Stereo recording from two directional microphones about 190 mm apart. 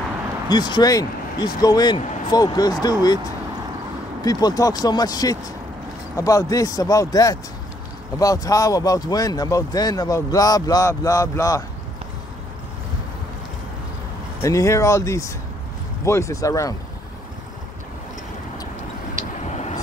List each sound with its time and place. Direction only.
0.5 s speech: 25° left (ahead or behind)
14.4 s speech: 15° left (ahead or behind)
19.5 s vehicle: 35° left (ahead or behind)